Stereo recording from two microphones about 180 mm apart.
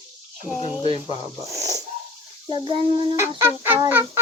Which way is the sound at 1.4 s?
20° right (ahead or behind).